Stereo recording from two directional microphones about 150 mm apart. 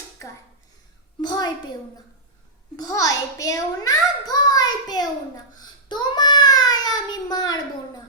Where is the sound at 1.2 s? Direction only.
30° left (ahead or behind).